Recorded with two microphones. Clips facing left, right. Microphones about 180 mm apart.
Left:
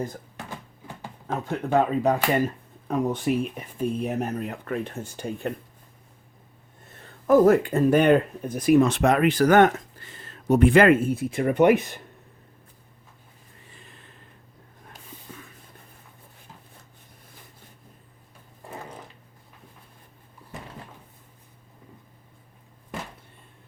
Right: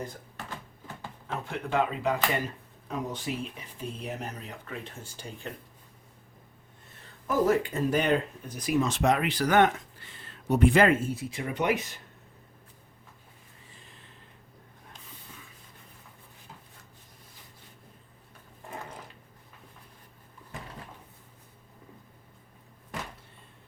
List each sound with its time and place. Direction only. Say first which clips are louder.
1.3 s speech: left 7 dB; 40° left (ahead or behind)
2.8 s speech: left 9 dB; 55° left (ahead or behind)
7.3 s speech: left 8 dB; 55° left (ahead or behind)
15.3 s a sound: left 8 dB; 45° left (ahead or behind)